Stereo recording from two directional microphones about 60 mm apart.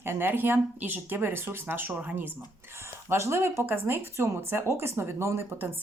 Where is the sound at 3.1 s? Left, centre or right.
Right.